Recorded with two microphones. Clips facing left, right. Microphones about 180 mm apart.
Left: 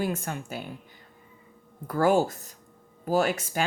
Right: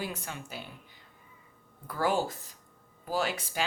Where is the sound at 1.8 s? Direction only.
45° left (ahead or behind).